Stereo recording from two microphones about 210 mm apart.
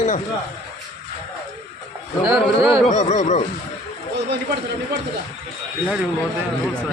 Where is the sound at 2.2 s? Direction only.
10° right (ahead or behind).